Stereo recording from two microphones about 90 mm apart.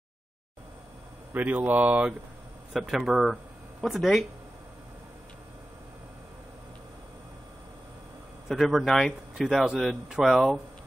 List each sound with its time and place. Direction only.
1.3 s speech: 20° right (ahead or behind)
2.7 s speech: centre (ahead or behind)
8.5 s speech: centre (ahead or behind)